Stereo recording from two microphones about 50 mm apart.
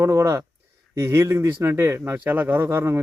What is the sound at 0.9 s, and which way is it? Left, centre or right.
A man's voice, right.